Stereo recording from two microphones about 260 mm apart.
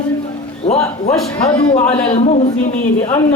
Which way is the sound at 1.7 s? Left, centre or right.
Left.